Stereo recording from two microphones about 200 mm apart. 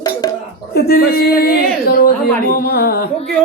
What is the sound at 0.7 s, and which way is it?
A woman's voice, 50° left (ahead or behind).